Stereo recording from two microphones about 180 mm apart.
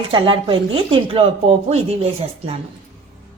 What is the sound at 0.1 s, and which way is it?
Speech, 25° right (ahead or behind).